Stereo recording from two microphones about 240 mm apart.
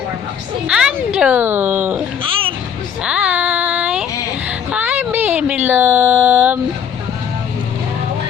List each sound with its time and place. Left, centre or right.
0.7 s speech: centre
2.2 s music: right
3.0 s child singing: centre
4.4 s a sound: centre